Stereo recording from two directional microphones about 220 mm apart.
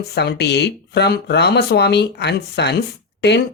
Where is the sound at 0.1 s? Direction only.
50° left (ahead or behind).